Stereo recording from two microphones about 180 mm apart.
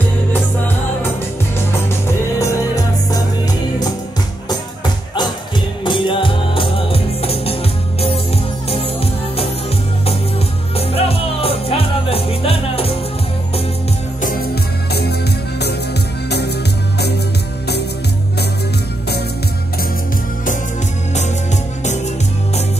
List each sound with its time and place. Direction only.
2.3 s music: 20° left (ahead or behind)
5.9 s music: 30° left (ahead or behind)
8.6 s music: 35° left (ahead or behind)
10.8 s music: 35° left (ahead or behind)
14.2 s music: 60° left (ahead or behind)
16.3 s music: 65° left (ahead or behind)